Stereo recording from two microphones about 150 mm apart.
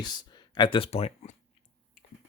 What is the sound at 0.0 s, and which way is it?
Speech, 30° left (ahead or behind).